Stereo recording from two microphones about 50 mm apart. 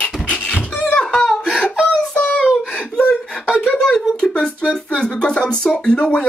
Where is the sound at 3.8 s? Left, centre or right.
Centre.